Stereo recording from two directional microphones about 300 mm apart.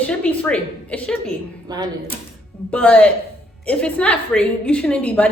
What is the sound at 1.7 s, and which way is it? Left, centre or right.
Speech, centre.